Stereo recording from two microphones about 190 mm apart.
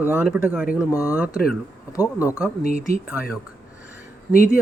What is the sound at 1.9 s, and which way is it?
Speech, 15° left (ahead or behind).